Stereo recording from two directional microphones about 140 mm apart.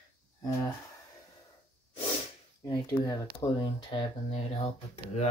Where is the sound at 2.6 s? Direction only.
30° left (ahead or behind).